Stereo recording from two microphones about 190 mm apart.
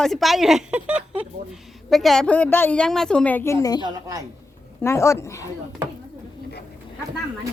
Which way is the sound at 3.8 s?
20° right (ahead or behind).